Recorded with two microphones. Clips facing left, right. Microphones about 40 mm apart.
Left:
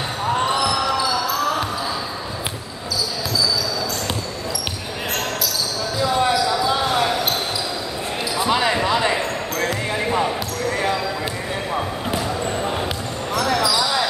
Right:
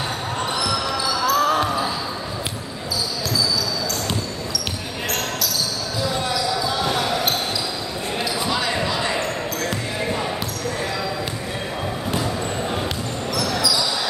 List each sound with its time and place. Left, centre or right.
8.5 s basketball bounce: left